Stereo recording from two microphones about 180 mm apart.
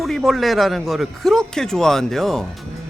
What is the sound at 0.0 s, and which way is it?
Speech, centre (ahead or behind).